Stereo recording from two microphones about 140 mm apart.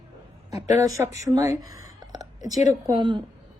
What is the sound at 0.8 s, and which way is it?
A woman's voice, 25° right (ahead or behind).